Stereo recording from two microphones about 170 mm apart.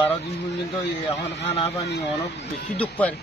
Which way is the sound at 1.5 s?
35° left (ahead or behind).